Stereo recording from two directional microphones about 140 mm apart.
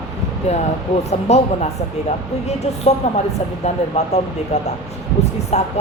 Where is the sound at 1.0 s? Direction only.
50° left (ahead or behind).